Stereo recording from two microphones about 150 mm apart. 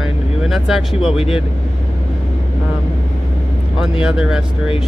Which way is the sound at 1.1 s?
40° left (ahead or behind).